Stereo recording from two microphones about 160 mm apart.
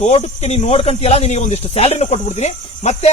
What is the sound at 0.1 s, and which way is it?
Speech, 40° left (ahead or behind).